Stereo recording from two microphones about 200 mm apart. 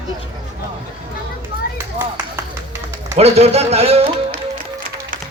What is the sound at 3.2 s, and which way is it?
Speech, 30° right (ahead or behind).